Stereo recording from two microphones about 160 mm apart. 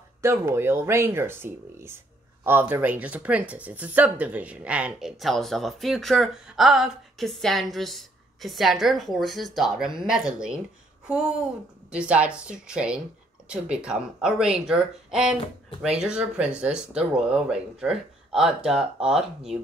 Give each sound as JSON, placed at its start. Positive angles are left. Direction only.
{"t": 0.2, "sound": "speech", "side_deg": -15}